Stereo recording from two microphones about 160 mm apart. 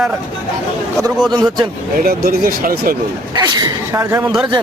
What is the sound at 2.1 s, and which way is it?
Speech, 65° right (ahead or behind).